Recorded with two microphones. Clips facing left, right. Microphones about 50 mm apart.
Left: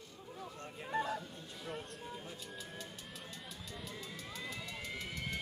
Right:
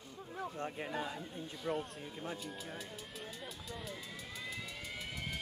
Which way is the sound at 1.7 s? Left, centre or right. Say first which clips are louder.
Right 7 dB; centre.